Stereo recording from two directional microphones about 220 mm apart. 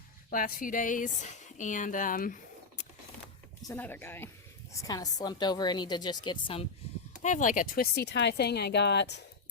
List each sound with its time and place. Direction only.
0.3 s speech: 40° left (ahead or behind)
3.7 s speech: 10° left (ahead or behind)
7.2 s speech: 35° left (ahead or behind); by 9.2 s 50° left (ahead or behind)